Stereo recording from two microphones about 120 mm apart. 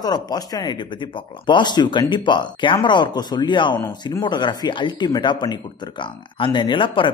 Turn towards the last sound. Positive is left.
turn(degrees=45)  # may be behind; listen again after turning